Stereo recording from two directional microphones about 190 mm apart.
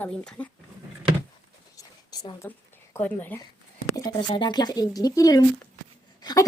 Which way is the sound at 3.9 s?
20° left (ahead or behind).